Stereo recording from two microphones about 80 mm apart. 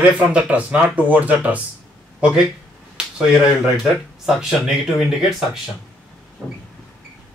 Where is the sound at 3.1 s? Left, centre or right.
Centre.